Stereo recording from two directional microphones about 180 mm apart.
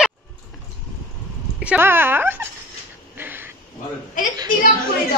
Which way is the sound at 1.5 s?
10° right (ahead or behind).